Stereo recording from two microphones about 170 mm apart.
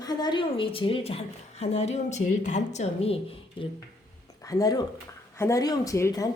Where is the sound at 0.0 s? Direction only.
25° left (ahead or behind).